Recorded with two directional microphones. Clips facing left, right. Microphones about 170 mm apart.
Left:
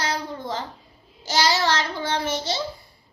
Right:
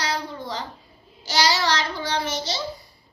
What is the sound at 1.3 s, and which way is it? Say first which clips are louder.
A child's voice: left 1 dB; 50° left (ahead or behind).